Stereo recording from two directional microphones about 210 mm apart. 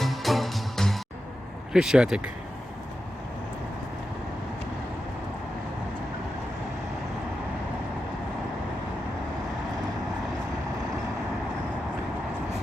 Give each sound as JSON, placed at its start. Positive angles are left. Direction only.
{"t": 0.0, "sound": "music", "side_deg": 0}
{"t": 1.7, "sound": "speech", "side_deg": -5}